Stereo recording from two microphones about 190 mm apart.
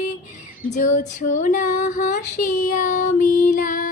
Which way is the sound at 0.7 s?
40° left (ahead or behind).